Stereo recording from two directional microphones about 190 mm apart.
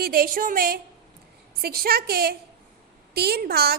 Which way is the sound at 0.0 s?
50° right (ahead or behind).